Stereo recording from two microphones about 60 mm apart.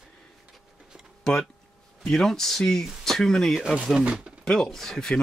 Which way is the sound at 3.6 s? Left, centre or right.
Centre.